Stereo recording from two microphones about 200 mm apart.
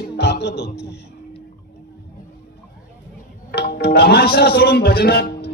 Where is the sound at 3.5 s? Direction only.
50° left (ahead or behind).